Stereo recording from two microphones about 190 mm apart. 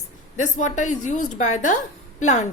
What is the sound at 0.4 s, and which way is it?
A woman's voice, 40° left (ahead or behind).